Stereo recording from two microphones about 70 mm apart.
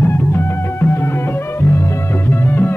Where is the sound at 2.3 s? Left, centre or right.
Left.